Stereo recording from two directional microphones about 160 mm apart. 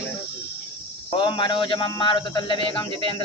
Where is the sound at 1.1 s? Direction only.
30° left (ahead or behind).